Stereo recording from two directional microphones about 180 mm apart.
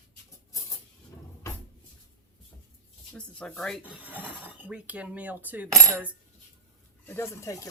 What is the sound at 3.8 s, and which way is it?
Filing, 10° right (ahead or behind).